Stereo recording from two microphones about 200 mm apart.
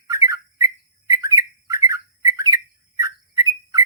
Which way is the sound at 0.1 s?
15° right (ahead or behind).